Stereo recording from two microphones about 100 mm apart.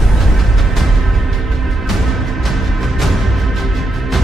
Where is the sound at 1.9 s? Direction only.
Centre (ahead or behind).